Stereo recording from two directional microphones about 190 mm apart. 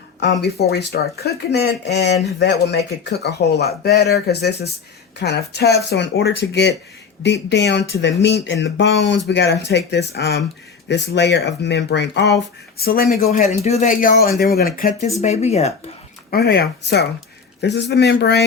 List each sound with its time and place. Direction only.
0.2 s speech: 60° left (ahead or behind)
12.7 s speech: 50° left (ahead or behind)
13.2 s speech: 35° left (ahead or behind); by 14.6 s 50° left (ahead or behind)
15.2 s speech: 35° left (ahead or behind)
16.3 s speech: 60° left (ahead or behind)